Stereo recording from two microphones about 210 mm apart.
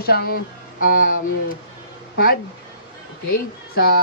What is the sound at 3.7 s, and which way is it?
Speech, 45° left (ahead or behind).